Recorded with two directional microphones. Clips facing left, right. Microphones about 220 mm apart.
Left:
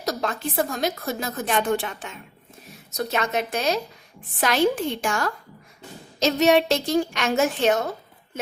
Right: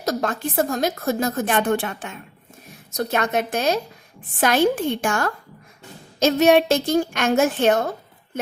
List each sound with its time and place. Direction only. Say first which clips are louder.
0.0 s a woman's voice: right 3 dB; 50° right (ahead or behind)